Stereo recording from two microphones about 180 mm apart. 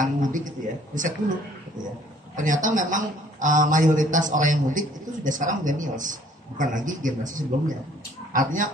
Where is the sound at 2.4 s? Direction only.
45° right (ahead or behind).